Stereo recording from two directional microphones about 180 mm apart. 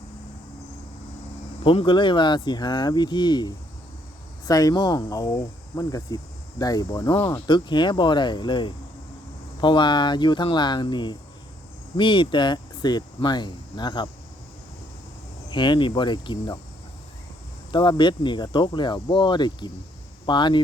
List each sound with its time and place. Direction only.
1.6 s speech: 25° left (ahead or behind)
15.4 s speech: 25° left (ahead or behind)
17.7 s speech: 25° left (ahead or behind)